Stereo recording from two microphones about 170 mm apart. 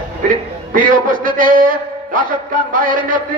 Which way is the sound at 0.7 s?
50° right (ahead or behind).